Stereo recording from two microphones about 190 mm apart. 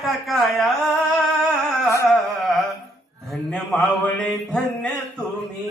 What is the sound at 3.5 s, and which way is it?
A man's voice, 5° left (ahead or behind).